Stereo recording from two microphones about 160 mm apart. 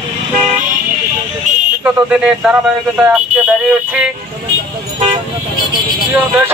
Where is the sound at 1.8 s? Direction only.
5° right (ahead or behind).